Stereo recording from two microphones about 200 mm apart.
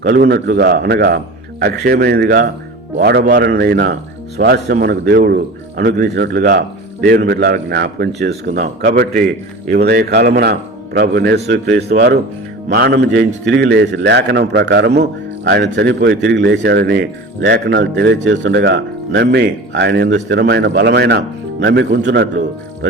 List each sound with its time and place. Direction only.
0.0 s a man's voice: 45° right (ahead or behind)